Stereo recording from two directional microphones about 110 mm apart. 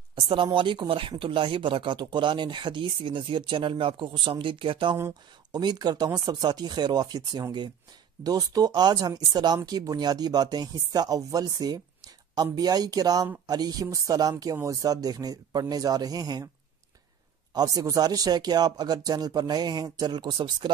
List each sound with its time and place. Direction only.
0.1 s speech: 50° right (ahead or behind)
5.5 s speech: 40° right (ahead or behind)
17.6 s speech: 30° right (ahead or behind)